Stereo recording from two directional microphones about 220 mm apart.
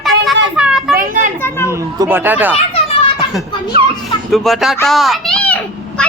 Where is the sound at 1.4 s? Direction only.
10° left (ahead or behind).